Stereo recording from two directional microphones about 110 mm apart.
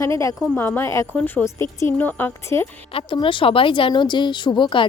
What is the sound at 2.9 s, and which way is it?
Speech, 50° left (ahead or behind).